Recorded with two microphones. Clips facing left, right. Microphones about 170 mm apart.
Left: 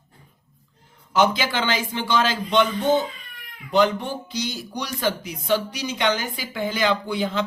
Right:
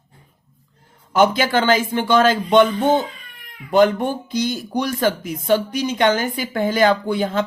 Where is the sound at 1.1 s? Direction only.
50° right (ahead or behind).